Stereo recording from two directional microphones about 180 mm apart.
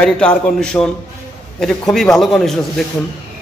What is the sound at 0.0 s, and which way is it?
A man's voice, 5° left (ahead or behind).